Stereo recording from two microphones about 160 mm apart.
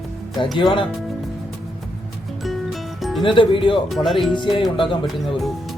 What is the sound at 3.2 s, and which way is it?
Speech, 30° left (ahead or behind).